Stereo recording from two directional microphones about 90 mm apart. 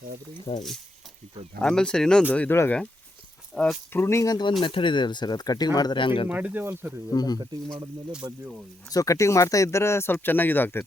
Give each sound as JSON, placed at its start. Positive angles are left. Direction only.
{"t": 0.5, "sound": "speech", "side_deg": 55}
{"t": 1.6, "sound": "speech", "side_deg": 10}
{"t": 3.5, "sound": "speech", "side_deg": 5}
{"t": 3.9, "sound": "speech", "side_deg": 30}
{"t": 4.6, "sound": "speech", "side_deg": 65}
{"t": 6.2, "sound": "speech", "side_deg": -15}
{"t": 7.1, "sound": "speech", "side_deg": 50}
{"t": 7.3, "sound": "speech", "side_deg": -50}
{"t": 8.1, "sound": "speech", "side_deg": -10}
{"t": 8.9, "sound": "speech", "side_deg": 40}